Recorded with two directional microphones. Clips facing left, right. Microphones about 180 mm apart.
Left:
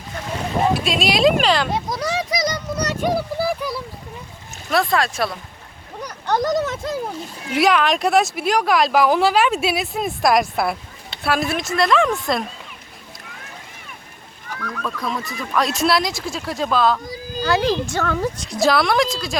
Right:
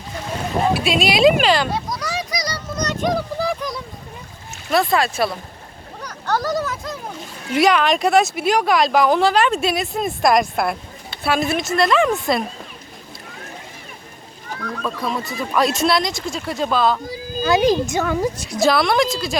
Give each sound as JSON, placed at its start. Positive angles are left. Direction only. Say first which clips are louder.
{"t": 0.7, "sound": "speech", "louder": "right 1 dB", "side_deg": -5}
{"t": 1.7, "sound": "a sound", "louder": "left 2 dB", "side_deg": 25}
{"t": 4.7, "sound": "speech", "louder": "right 1 dB", "side_deg": -5}
{"t": 6.0, "sound": "speech", "louder": "left 2 dB", "side_deg": 15}
{"t": 7.5, "sound": "speech", "louder": "right 1 dB", "side_deg": 0}
{"t": 14.5, "sound": "a sound", "louder": "right 2 dB", "side_deg": -30}
{"t": 14.8, "sound": "speech", "louder": "right 2 dB", "side_deg": -5}
{"t": 15.2, "sound": "speech", "louder": "right 3 dB", "side_deg": -25}
{"t": 15.5, "sound": "speech", "louder": "right 1 dB", "side_deg": 0}
{"t": 17.4, "sound": "speech", "louder": "right 3 dB", "side_deg": -15}
{"t": 18.6, "sound": "speech", "louder": "right 1 dB", "side_deg": 0}